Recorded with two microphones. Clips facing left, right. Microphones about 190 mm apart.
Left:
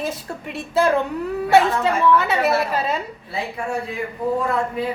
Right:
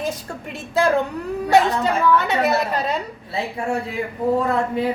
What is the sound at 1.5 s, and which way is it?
A woman's voice, centre (ahead or behind).